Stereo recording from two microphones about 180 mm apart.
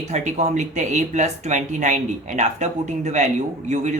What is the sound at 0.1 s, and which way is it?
Speech, 40° right (ahead or behind).